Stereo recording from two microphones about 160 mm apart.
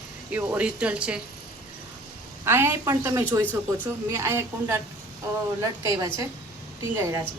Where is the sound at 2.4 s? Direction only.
15° right (ahead or behind).